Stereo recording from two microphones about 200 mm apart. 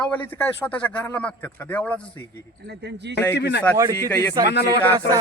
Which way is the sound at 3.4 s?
60° left (ahead or behind).